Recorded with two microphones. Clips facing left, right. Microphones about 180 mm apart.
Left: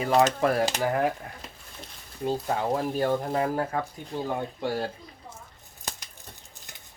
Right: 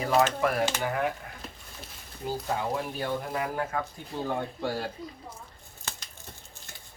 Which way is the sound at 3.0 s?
40° left (ahead or behind).